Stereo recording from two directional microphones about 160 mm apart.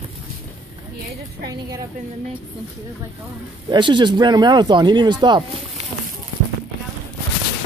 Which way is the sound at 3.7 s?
30° right (ahead or behind).